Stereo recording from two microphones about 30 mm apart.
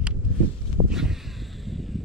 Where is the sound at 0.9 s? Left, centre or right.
Centre.